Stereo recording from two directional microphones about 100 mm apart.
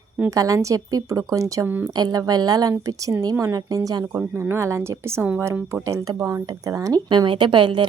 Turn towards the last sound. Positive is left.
turn(degrees=-55)  # may be behind; listen again after turning